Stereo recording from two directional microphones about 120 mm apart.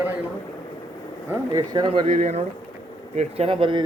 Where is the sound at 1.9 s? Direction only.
60° right (ahead or behind).